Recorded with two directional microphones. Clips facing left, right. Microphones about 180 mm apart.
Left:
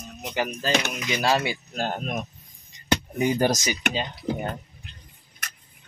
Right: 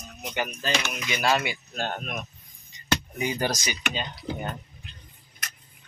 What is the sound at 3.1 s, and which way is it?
Speech, 45° left (ahead or behind).